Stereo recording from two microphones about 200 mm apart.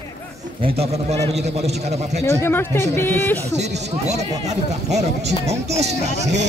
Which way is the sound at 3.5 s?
35° right (ahead or behind).